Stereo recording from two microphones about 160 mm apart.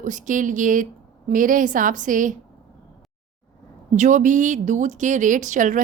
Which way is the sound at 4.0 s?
50° right (ahead or behind).